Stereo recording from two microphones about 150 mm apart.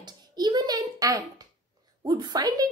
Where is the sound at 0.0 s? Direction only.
30° right (ahead or behind).